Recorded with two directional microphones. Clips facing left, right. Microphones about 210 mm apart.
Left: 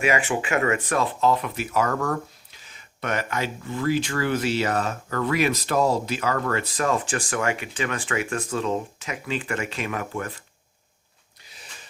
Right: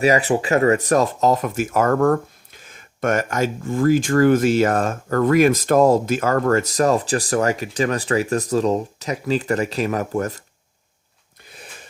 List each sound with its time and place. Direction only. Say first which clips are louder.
0.0 s speech: right 6 dB; 35° right (ahead or behind)
11.4 s gasp: right 8 dB; 55° right (ahead or behind)